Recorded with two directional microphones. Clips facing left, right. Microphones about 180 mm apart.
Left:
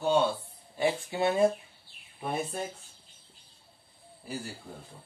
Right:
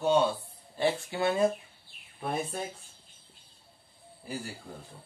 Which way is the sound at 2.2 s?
Centre (ahead or behind).